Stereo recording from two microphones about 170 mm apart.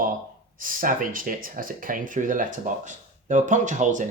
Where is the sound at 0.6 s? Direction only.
55° right (ahead or behind).